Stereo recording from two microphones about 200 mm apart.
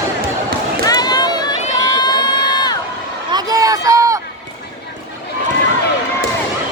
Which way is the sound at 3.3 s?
20° right (ahead or behind).